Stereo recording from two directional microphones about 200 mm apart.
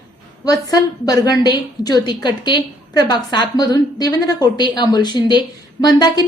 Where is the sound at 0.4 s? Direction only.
20° left (ahead or behind).